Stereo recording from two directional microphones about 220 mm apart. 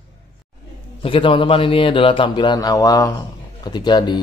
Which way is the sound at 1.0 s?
25° left (ahead or behind).